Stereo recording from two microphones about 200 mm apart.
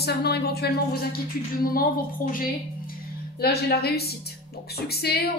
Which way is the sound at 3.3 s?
50° left (ahead or behind).